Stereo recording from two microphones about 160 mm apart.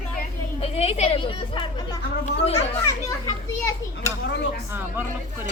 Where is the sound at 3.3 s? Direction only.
20° left (ahead or behind).